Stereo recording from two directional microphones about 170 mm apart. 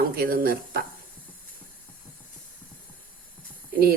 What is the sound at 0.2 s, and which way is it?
Speech, 60° right (ahead or behind).